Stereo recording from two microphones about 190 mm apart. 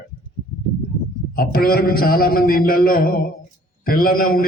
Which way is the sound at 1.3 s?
50° left (ahead or behind).